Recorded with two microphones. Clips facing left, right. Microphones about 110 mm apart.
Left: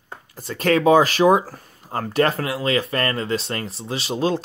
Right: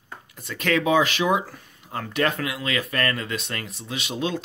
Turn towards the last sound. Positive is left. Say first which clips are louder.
# left 5 dB
turn(degrees=35)  # may be behind; listen again after turning